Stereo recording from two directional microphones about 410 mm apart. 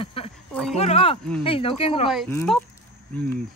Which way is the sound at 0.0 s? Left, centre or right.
Centre.